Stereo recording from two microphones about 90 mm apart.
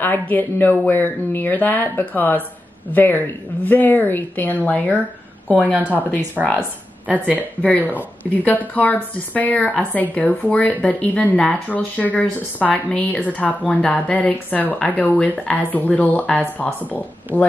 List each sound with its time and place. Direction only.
0.0 s speech: 20° left (ahead or behind)
5.6 s a woman's voice: 15° right (ahead or behind)
7.6 s a woman's voice: 15° left (ahead or behind)